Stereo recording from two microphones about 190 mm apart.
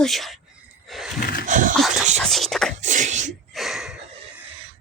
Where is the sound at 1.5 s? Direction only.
40° right (ahead or behind).